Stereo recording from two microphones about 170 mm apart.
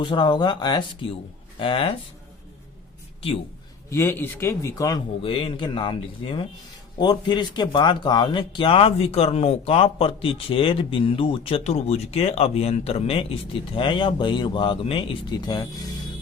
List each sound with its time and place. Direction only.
0.0 s a man's voice: 30° left (ahead or behind)
3.8 s a man's voice: 15° left (ahead or behind)